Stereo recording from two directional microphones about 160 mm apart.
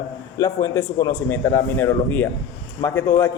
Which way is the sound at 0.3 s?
20° left (ahead or behind).